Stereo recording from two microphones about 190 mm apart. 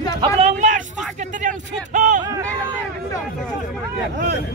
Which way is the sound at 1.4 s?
40° right (ahead or behind).